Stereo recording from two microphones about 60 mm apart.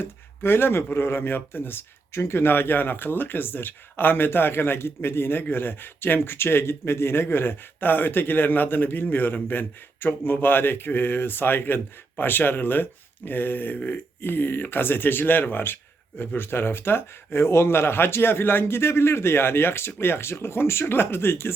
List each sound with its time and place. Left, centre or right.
0.0 s speech: left